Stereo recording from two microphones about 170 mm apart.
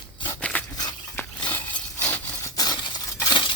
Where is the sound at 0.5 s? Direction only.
10° left (ahead or behind).